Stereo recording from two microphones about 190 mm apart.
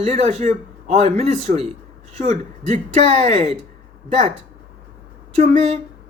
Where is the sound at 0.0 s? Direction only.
35° right (ahead or behind).